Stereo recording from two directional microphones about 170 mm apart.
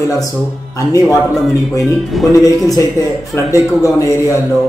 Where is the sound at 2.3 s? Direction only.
20° left (ahead or behind).